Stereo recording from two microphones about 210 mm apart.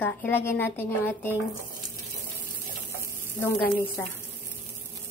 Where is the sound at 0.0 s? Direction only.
10° left (ahead or behind).